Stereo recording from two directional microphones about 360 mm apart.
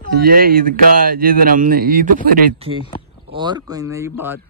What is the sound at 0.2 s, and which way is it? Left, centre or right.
Speech, right.